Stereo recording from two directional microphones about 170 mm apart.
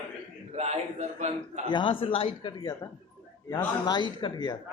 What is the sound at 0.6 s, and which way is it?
A man's voice, 40° right (ahead or behind).